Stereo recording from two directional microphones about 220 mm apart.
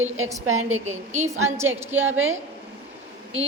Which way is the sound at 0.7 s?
30° right (ahead or behind).